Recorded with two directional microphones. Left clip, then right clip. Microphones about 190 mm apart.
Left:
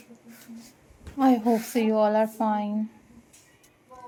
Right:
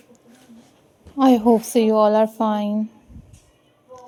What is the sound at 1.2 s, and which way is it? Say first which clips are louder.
Speech: right 7 dB; 45° right (ahead or behind).